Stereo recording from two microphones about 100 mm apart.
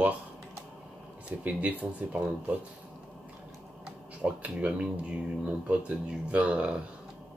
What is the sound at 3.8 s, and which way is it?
Speech, 15° right (ahead or behind).